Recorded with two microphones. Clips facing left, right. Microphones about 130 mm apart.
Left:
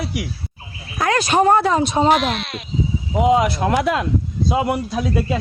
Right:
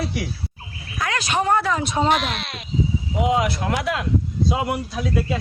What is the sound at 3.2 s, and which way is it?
Speech, 30° left (ahead or behind).